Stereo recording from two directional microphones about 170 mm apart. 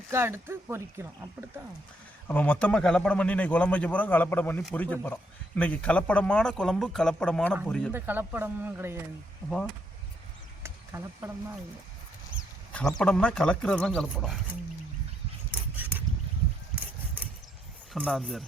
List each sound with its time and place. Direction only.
0.1 s speech: 15° right (ahead or behind)
2.2 s speech: 10° left (ahead or behind)
7.9 s speech: 10° right (ahead or behind)
10.6 s a sound: 15° right (ahead or behind)
13.0 s speech: 5° left (ahead or behind)
15.7 s a sound: 10° right (ahead or behind)
17.9 s speech: 5° left (ahead or behind)